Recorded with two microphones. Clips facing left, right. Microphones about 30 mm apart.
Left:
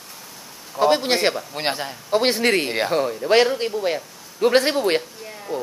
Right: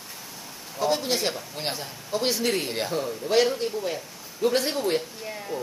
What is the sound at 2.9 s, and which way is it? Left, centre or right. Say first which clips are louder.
Speech: left 7 dB; left.